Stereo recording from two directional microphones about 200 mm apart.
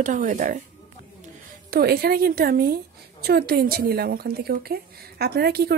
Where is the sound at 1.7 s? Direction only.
50° right (ahead or behind).